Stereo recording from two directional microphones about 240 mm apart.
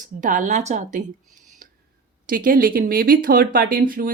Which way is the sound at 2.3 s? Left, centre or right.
Right.